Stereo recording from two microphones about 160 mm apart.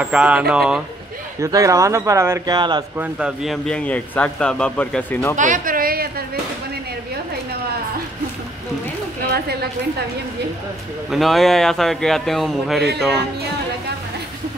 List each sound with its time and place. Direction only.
0.0 s speech: 5° right (ahead or behind)
1.4 s a man's voice: 20° right (ahead or behind)
3.0 s speech: 5° right (ahead or behind)
3.6 s speech: 5° left (ahead or behind)
5.3 s a sound: 55° right (ahead or behind); by 6.2 s 70° right (ahead or behind)
9.3 s a woman's voice: 90° right
11.1 s speech: centre (ahead or behind)